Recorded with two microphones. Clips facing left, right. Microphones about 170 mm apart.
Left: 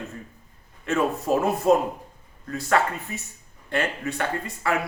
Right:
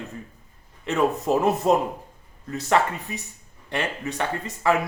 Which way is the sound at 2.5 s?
20° right (ahead or behind).